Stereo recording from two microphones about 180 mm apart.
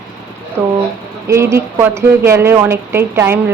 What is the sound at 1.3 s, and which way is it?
A woman's voice, 15° right (ahead or behind).